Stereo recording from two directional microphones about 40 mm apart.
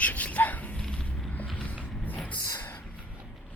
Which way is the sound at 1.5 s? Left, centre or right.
Left.